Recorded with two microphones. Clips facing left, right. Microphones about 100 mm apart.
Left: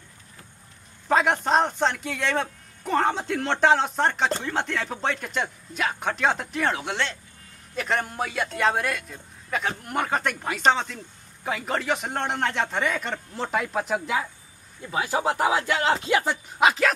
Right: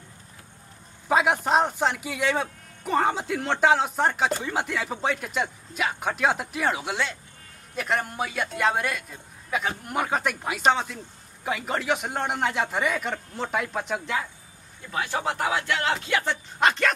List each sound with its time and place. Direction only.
1.0 s a man's voice: 5° right (ahead or behind)
14.9 s speech: 20° left (ahead or behind)
15.3 s a sound: 20° left (ahead or behind)
16.1 s speech: 20° left (ahead or behind)
16.5 s a man's voice: 5° left (ahead or behind)